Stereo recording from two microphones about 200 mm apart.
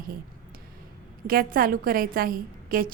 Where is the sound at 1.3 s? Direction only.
45° right (ahead or behind).